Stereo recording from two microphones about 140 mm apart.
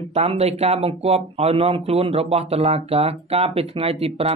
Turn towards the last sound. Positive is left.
turn(degrees=-45)  # may be behind; listen again after turning